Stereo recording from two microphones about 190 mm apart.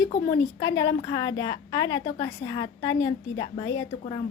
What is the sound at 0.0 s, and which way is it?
A woman's voice, 20° left (ahead or behind).